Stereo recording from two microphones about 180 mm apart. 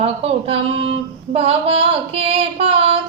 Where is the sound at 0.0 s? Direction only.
35° right (ahead or behind).